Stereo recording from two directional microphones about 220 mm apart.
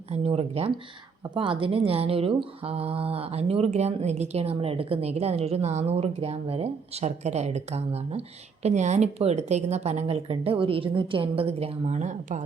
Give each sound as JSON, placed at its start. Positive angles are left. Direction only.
{"t": 0.1, "sound": "speech", "side_deg": -30}